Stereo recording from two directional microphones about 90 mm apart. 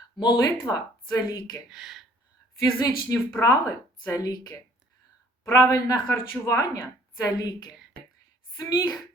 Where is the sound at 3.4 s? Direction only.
40° left (ahead or behind).